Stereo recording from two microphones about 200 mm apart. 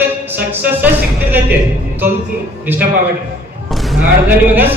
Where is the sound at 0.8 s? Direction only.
10° right (ahead or behind).